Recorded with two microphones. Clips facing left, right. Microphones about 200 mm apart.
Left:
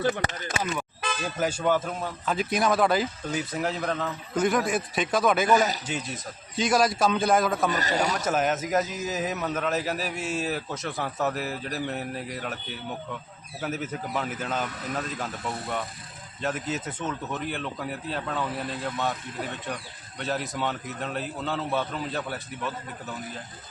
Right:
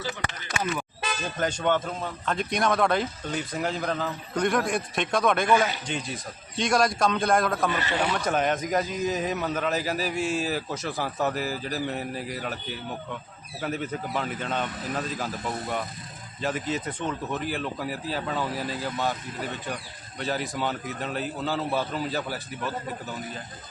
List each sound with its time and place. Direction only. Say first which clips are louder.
0.2 s speech: left 3 dB; 40° left (ahead or behind)
1.4 s speech: even; 5° left (ahead or behind)
7.7 s speech: left 1 dB; 40° left (ahead or behind)
8.1 s speech: even; 5° left (ahead or behind)